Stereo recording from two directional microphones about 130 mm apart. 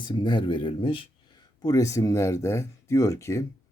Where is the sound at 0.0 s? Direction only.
35° left (ahead or behind).